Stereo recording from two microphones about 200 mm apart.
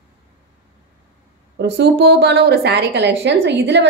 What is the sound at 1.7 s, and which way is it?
A woman's voice, 60° right (ahead or behind).